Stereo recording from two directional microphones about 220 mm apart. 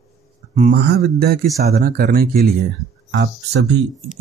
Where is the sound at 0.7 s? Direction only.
45° right (ahead or behind).